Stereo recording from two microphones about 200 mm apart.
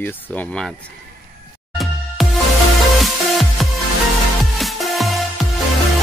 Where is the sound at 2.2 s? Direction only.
Centre (ahead or behind).